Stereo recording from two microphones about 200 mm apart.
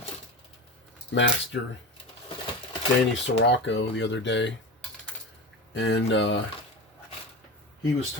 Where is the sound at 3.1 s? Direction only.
60° left (ahead or behind).